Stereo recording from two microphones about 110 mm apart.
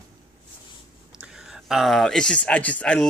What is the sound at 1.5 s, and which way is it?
Speech, centre (ahead or behind).